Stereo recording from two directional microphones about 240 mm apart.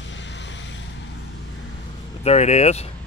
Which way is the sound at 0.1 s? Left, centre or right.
Left.